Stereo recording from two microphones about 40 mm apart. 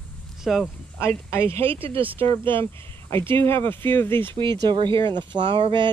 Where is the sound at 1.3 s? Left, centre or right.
Left.